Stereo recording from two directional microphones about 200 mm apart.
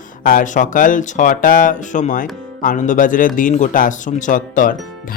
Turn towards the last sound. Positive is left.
turn(degrees=40)  # may be behind; listen again after turning